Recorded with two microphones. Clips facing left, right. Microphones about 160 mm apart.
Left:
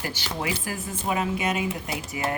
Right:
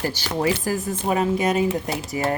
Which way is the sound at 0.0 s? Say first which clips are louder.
Right 7 dB; 40° right (ahead or behind).